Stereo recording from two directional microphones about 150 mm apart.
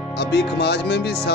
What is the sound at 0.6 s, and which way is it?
Speech, 90° left.